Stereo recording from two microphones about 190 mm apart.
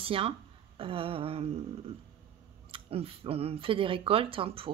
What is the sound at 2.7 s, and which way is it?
A woman's voice, 30° right (ahead or behind).